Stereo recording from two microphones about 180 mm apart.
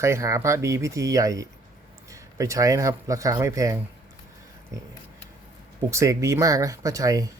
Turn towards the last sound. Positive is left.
turn(degrees=-20)  # may be behind; listen again after turning